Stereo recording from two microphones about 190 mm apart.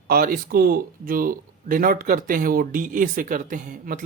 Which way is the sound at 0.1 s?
50° right (ahead or behind).